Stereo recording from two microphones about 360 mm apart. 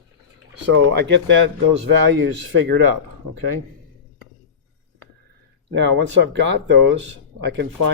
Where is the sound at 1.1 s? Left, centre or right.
Right.